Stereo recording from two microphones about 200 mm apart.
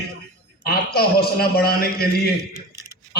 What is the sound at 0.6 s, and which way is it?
A man's voice, 50° left (ahead or behind).